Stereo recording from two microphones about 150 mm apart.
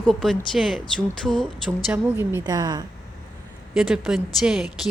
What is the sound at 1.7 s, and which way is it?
Speech, 15° right (ahead or behind).